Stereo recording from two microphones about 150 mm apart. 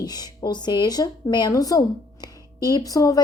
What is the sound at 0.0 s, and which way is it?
A woman's voice, 25° left (ahead or behind).